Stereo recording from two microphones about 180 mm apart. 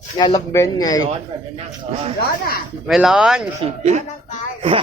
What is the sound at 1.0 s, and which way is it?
Speech, 35° right (ahead or behind).